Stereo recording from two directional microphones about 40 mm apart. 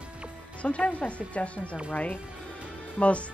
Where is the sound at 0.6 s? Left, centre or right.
Left.